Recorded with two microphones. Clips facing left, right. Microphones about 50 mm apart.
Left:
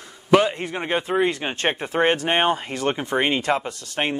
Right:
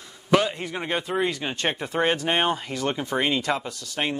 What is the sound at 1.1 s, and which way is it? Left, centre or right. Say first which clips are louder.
Speech: left 4 dB; left.